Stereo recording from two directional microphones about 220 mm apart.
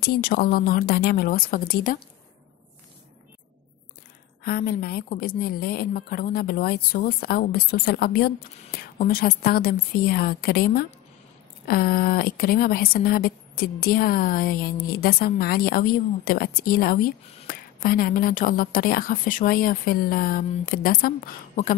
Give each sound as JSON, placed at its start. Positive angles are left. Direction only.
{"t": 0.0, "sound": "a woman's voice", "side_deg": 45}
{"t": 4.4, "sound": "a woman's voice", "side_deg": 45}